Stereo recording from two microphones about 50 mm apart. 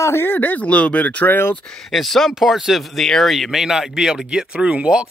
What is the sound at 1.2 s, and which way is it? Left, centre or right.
Speech, left.